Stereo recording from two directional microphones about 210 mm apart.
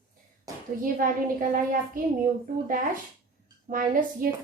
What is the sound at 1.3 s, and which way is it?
Speech, 40° right (ahead or behind).